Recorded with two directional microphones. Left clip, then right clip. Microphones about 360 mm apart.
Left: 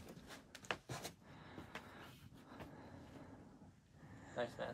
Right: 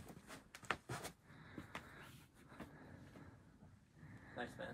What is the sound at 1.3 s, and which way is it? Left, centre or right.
Vehicle, centre.